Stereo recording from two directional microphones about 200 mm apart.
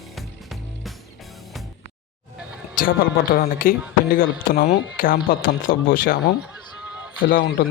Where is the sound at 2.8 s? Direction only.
45° left (ahead or behind).